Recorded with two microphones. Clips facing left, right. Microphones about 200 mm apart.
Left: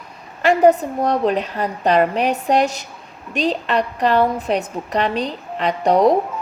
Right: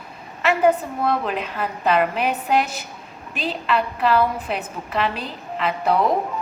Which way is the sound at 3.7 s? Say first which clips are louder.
Right 1 dB; 40° left (ahead or behind).